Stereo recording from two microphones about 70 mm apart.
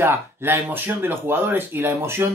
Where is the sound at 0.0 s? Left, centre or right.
Right.